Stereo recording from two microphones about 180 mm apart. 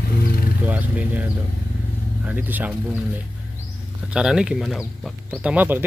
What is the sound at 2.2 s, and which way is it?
Speech, 10° right (ahead or behind).